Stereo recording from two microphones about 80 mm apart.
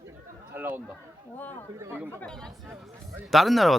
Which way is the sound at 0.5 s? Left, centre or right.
Right.